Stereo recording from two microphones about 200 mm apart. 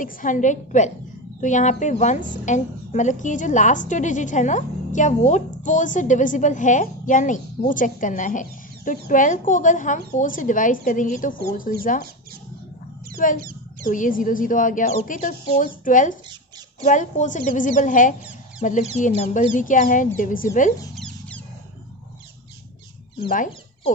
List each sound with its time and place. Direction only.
0.0 s a woman's voice: 40° left (ahead or behind)
13.4 s a sound: 45° right (ahead or behind)
13.8 s a woman's voice: 40° left (ahead or behind)
20.9 s cat: 5° left (ahead or behind)